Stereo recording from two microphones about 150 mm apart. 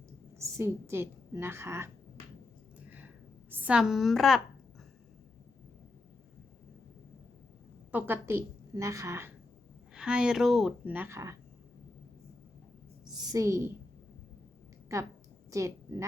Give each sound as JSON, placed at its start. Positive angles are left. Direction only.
{"t": 0.3, "sound": "a woman's voice", "side_deg": -20}
{"t": 3.5, "sound": "a woman's voice", "side_deg": -10}
{"t": 7.9, "sound": "a woman's voice", "side_deg": -15}
{"t": 9.9, "sound": "speech", "side_deg": -5}
{"t": 13.3, "sound": "speech", "side_deg": -20}
{"t": 14.9, "sound": "a woman's voice", "side_deg": -20}